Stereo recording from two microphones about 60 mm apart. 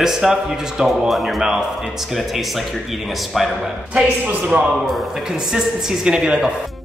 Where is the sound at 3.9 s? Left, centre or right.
Right.